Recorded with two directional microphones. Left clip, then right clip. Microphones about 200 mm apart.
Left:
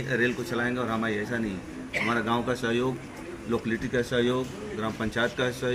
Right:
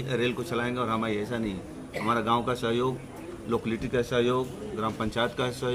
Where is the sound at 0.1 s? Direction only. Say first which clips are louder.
Left 2 dB; 25° right (ahead or behind).